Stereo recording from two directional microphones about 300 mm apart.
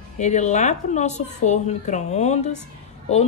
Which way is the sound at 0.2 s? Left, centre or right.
Left.